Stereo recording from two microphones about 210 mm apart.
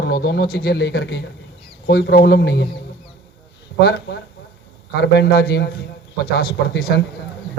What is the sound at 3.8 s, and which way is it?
Speech, 55° left (ahead or behind).